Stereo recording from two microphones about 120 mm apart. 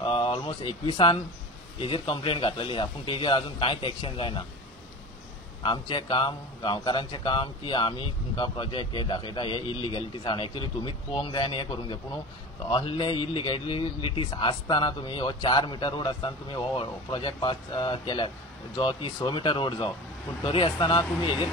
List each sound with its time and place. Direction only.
0.0 s a sound: 40° left (ahead or behind)
1.8 s a man's voice: 45° left (ahead or behind)
5.6 s a man's voice: 40° left (ahead or behind)